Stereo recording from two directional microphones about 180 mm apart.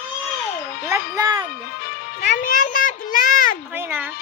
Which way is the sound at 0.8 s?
15° right (ahead or behind).